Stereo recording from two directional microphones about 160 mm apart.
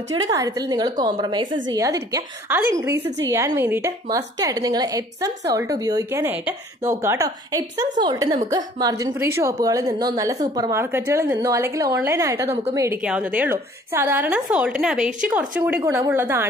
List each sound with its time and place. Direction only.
0.1 s a woman's voice: 20° right (ahead or behind)
13.0 s a woman's voice: 10° right (ahead or behind)